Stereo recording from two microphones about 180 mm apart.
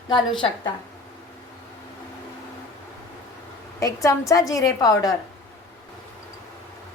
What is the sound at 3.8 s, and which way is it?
A woman's voice, 15° left (ahead or behind).